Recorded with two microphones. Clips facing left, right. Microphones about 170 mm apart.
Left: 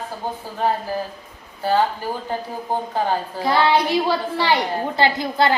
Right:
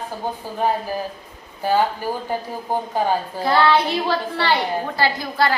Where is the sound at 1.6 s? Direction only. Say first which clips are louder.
Even; 10° right (ahead or behind).